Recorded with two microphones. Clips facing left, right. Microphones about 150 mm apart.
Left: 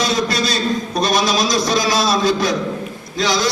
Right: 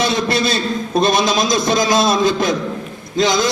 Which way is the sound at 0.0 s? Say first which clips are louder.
Right 2 dB; 25° right (ahead or behind).